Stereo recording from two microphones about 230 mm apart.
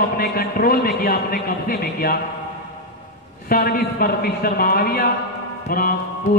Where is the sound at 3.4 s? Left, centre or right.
Left.